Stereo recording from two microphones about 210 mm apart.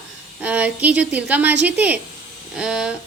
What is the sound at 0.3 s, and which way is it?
A woman's voice, 5° right (ahead or behind).